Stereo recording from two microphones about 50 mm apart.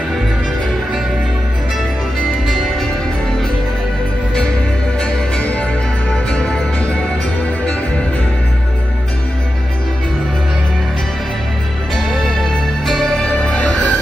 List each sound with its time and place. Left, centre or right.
5.0 s music: left
12.1 s music: centre
13.4 s music: left